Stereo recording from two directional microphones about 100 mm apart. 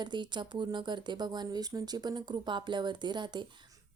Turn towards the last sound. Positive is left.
turn(degrees=-50)  # may be behind; listen again after turning